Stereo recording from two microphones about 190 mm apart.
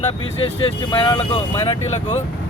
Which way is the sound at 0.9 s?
25° left (ahead or behind).